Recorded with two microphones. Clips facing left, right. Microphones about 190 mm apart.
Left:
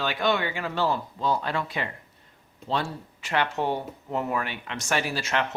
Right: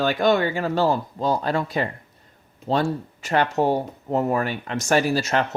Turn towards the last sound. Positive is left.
turn(degrees=-40)  # may be behind; listen again after turning